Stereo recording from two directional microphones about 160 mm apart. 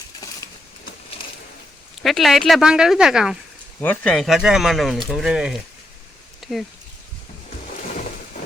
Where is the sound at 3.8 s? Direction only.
10° left (ahead or behind).